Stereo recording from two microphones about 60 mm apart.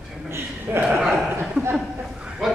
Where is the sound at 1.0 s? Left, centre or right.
Centre.